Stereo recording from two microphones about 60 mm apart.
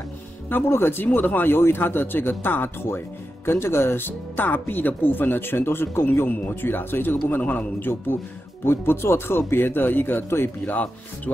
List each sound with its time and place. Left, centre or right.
0.5 s speech: left
8.6 s speech: left
10.6 s speech: left